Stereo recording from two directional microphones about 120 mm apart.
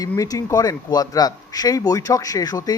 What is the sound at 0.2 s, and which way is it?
Speech, 30° left (ahead or behind).